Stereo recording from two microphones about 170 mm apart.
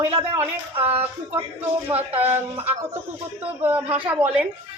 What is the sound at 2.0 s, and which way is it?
Speech, 10° right (ahead or behind).